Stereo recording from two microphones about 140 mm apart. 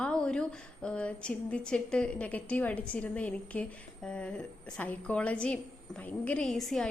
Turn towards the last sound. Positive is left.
turn(degrees=0)  # may be behind; listen again after turning